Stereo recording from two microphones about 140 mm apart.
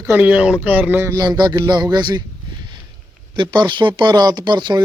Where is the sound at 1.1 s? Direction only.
30° right (ahead or behind).